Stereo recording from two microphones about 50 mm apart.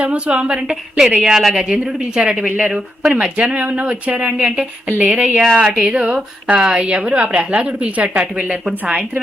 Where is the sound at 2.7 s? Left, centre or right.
Centre.